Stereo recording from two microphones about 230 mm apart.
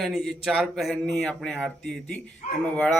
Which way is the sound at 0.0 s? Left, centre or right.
Centre.